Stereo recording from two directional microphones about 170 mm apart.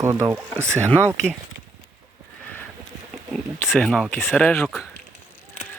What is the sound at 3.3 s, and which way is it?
Speech, 5° left (ahead or behind).